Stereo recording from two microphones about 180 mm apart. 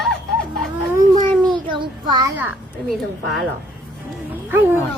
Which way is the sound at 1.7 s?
25° right (ahead or behind).